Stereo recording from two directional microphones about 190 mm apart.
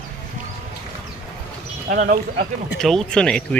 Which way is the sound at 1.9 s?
50° right (ahead or behind).